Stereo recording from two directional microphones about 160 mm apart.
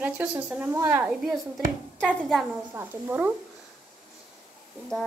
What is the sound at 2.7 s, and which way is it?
Speech, 15° right (ahead or behind).